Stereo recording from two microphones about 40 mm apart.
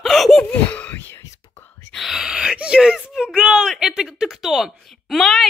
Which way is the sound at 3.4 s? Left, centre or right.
Right.